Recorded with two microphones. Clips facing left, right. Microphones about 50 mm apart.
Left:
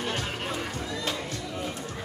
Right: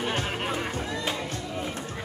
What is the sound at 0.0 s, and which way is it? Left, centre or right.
Music, right.